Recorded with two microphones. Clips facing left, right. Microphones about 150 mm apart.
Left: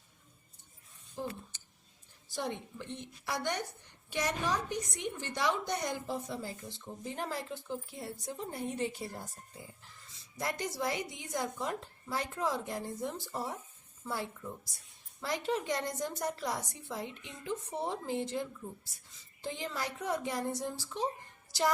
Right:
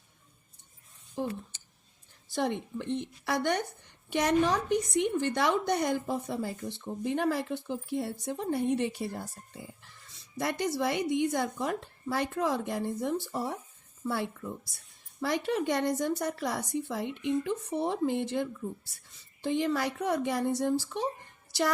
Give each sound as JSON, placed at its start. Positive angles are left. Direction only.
{"t": 1.2, "sound": "a woman's voice", "side_deg": -65}
{"t": 10.3, "sound": "a woman's voice", "side_deg": -70}
{"t": 15.2, "sound": "a woman's voice", "side_deg": -65}